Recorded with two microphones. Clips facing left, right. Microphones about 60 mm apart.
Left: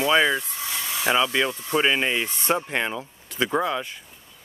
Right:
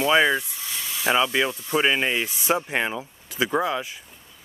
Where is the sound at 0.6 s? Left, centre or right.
Left.